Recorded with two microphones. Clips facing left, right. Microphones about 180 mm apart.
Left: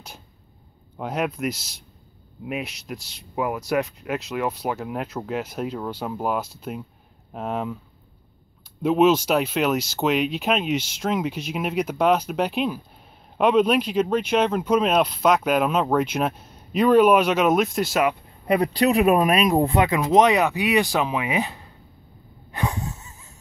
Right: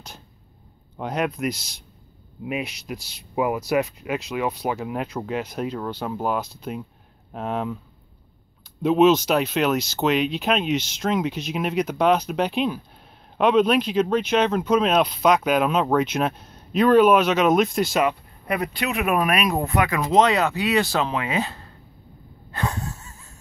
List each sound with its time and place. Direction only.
0.9 s speech: 5° left (ahead or behind)
8.8 s speech: 10° left (ahead or behind)
18.5 s speech: 35° left (ahead or behind)
20.0 s speech: 15° left (ahead or behind)
22.5 s wheeze: 15° left (ahead or behind)